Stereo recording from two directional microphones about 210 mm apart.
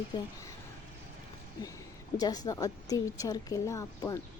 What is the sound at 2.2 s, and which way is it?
A woman's voice, 20° left (ahead or behind).